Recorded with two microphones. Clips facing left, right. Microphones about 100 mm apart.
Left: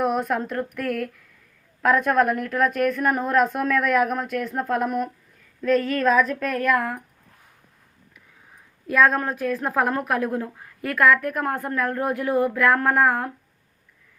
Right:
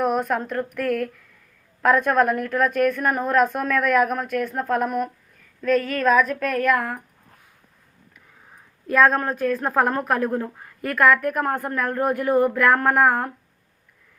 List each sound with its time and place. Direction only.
0.0 s a woman's voice: centre (ahead or behind)
5.6 s speech: 30° left (ahead or behind)
6.7 s speech: 35° right (ahead or behind)
8.9 s a woman's voice: 5° left (ahead or behind)